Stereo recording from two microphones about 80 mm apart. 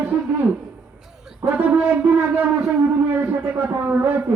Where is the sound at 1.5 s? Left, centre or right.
Centre.